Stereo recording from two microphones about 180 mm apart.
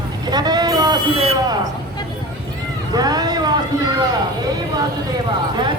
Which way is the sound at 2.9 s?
20° right (ahead or behind).